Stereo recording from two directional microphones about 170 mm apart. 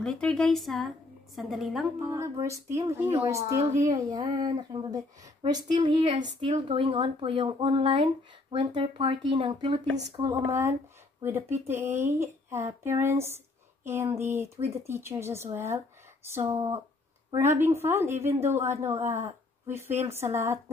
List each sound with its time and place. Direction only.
0.0 s a woman's voice: 5° left (ahead or behind)
2.0 s speech: 20° right (ahead or behind)
10.1 s speech: 20° right (ahead or behind)